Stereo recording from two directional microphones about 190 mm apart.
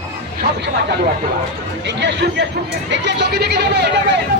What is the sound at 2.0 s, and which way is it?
Speech, 65° right (ahead or behind).